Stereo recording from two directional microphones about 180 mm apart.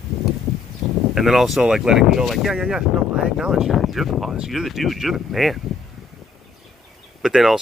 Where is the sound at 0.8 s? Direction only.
Centre (ahead or behind).